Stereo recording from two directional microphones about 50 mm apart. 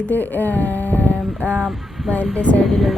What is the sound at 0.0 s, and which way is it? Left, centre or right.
Speech, left.